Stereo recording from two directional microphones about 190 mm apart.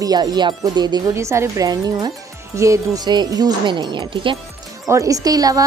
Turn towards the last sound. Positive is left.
turn(degrees=-20)  # may be behind; listen again after turning